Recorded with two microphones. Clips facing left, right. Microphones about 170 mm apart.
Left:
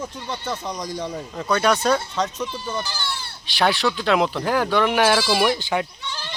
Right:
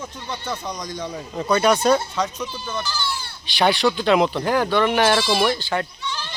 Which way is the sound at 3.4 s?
Centre (ahead or behind).